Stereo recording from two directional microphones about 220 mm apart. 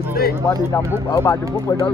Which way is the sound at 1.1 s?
15° left (ahead or behind).